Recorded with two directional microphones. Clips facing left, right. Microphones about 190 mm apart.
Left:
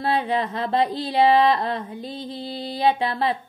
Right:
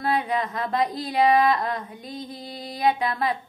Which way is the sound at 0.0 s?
30° left (ahead or behind).